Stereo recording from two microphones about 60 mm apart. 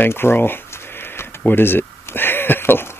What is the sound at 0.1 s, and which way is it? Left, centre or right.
Speech, left.